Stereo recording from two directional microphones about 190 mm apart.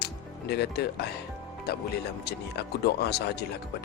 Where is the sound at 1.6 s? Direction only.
60° left (ahead or behind).